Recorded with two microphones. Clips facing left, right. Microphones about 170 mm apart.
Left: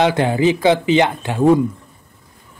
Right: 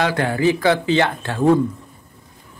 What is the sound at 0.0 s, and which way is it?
Speech, 20° left (ahead or behind).